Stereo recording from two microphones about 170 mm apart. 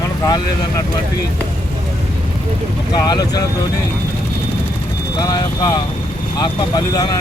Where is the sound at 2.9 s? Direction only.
25° left (ahead or behind).